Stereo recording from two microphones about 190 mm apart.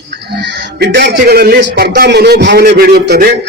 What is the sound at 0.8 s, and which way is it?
A man's voice, 65° right (ahead or behind).